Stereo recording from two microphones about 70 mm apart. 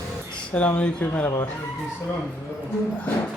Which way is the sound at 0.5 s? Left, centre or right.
Centre.